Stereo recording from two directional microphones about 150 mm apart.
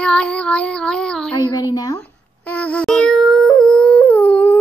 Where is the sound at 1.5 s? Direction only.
25° left (ahead or behind).